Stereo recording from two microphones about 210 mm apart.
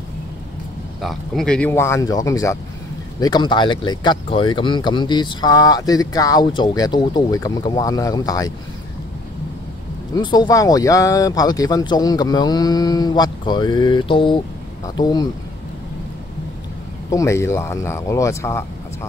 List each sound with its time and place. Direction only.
1.0 s speech: centre (ahead or behind); by 8.5 s 15° left (ahead or behind)
10.1 s speech: 20° left (ahead or behind)
17.1 s speech: 15° left (ahead or behind)